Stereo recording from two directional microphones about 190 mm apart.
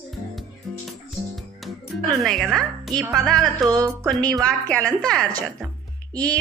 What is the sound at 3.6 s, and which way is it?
Music, 20° right (ahead or behind).